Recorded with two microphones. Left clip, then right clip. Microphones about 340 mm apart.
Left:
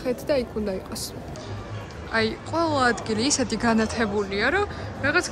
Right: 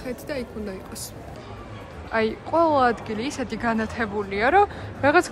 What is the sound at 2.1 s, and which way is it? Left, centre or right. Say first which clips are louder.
Speech: right 2 dB; centre.